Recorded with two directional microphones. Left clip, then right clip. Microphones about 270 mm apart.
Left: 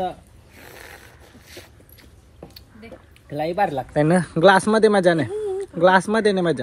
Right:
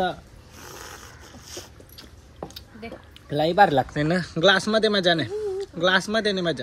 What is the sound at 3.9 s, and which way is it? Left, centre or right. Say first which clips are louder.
Speech: left 6 dB; centre.